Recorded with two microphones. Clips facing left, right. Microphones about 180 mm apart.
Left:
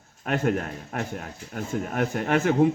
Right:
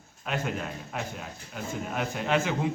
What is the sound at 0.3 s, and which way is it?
A man's voice, 55° left (ahead or behind).